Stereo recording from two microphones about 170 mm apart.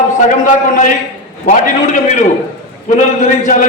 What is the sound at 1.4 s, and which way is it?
A man's voice, 50° left (ahead or behind).